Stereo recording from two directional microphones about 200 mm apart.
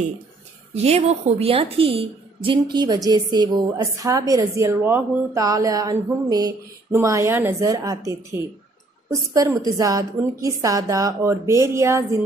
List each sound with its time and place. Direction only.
0.7 s a woman's voice: 30° right (ahead or behind); by 12.0 s 15° right (ahead or behind)